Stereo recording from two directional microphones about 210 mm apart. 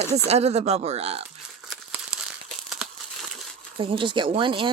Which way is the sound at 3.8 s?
25° right (ahead or behind).